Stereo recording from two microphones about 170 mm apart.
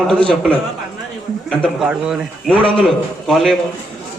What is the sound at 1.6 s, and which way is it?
A man's voice, 5° right (ahead or behind).